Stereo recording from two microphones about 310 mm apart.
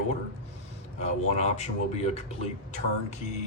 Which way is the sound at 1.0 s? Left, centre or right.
Left.